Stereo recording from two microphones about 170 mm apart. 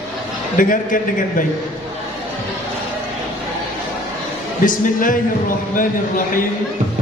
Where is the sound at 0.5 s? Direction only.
50° left (ahead or behind).